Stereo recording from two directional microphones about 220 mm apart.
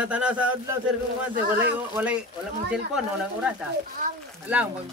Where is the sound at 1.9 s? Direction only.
5° right (ahead or behind).